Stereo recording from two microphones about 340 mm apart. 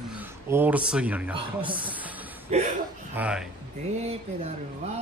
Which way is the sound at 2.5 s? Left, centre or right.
Centre.